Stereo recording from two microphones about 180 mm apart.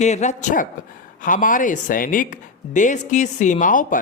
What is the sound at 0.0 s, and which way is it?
A man's voice, 40° left (ahead or behind).